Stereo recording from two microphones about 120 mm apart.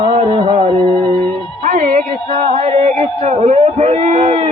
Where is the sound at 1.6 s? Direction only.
90° right.